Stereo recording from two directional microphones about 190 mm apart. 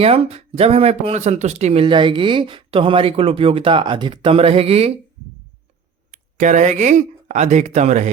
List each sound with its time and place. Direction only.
0.0 s speech: 35° right (ahead or behind)
6.1 s speech: 40° right (ahead or behind)